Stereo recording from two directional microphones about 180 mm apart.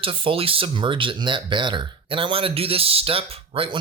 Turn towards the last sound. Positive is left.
turn(degrees=-30)  # may be behind; listen again after turning